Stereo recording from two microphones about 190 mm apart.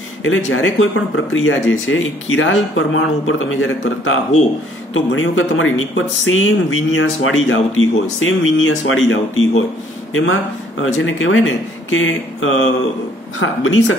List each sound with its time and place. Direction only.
0.5 s speech: 90° left